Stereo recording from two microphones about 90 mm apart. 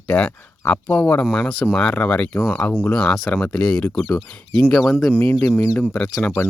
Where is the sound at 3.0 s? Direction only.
Centre (ahead or behind).